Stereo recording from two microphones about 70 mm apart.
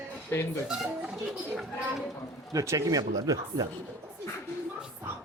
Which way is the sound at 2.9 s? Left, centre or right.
Right.